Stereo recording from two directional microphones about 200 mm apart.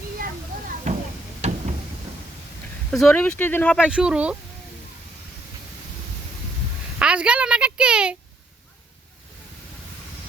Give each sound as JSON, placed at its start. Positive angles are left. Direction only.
{"t": 0.9, "sound": "a sound", "side_deg": -35}
{"t": 2.9, "sound": "speech", "side_deg": 5}
{"t": 3.8, "sound": "speech", "side_deg": -5}
{"t": 7.0, "sound": "a child's voice", "side_deg": -5}